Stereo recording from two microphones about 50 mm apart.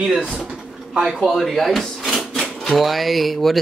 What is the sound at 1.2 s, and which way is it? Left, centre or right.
Speech, centre.